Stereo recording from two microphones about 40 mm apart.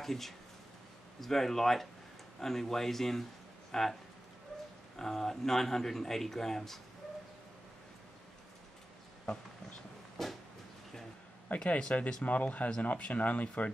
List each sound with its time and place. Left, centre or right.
0.0 s speech: centre
4.9 s speech: centre
10.2 s a sound: centre
11.6 s speech: left
12.3 s speech: left